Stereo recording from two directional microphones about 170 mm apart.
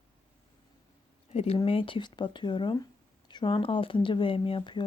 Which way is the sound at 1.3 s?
35° left (ahead or behind).